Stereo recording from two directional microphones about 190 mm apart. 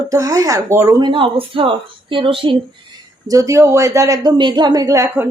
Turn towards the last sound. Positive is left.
turn(degrees=-15)  # may be behind; listen again after turning